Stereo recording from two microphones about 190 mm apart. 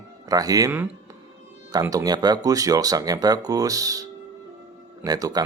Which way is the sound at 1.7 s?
20° right (ahead or behind).